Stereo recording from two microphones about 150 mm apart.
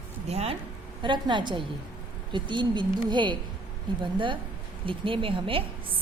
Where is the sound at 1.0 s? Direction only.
30° right (ahead or behind).